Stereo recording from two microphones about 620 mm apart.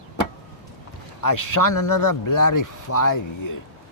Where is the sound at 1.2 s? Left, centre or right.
Left.